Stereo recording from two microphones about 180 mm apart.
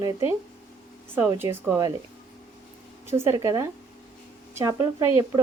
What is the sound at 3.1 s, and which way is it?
Speech, 15° right (ahead or behind).